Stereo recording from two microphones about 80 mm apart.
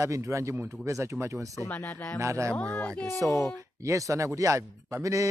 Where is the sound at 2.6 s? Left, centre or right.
Centre.